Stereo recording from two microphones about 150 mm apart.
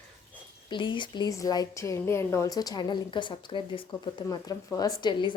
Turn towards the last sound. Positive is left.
turn(degrees=30)  # may be behind; listen again after turning